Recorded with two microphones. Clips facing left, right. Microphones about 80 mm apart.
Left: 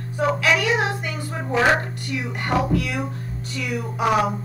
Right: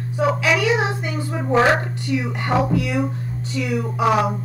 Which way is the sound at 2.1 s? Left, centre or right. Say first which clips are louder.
Right 5 dB; left.